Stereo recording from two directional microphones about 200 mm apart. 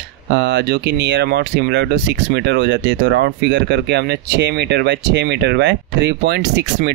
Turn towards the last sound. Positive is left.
turn(degrees=-60)  # may be behind; listen again after turning